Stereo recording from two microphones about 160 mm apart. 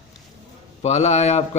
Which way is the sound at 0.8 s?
45° left (ahead or behind).